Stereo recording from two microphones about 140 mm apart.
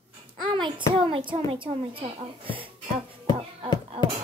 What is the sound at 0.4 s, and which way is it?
A child's voice, 35° right (ahead or behind).